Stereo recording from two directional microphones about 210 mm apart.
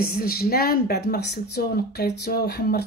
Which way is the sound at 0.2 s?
45° left (ahead or behind).